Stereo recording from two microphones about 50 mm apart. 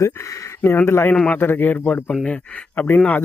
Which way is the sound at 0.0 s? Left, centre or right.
Left.